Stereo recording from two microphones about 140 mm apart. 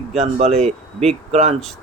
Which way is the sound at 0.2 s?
50° right (ahead or behind).